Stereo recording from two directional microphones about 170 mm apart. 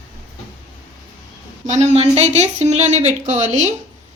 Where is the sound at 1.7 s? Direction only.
40° right (ahead or behind).